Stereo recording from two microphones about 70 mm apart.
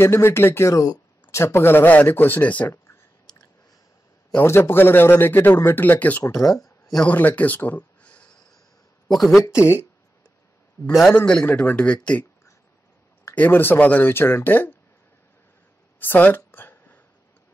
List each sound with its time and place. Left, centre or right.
0.0 s speech: left
0.7 s speech: left
1.6 s speech: left
4.4 s speech: left
6.6 s a sound: centre
7.1 s speech: left
9.1 s speech: centre
11.1 s speech: centre
13.3 s speech: left
16.0 s a sound: left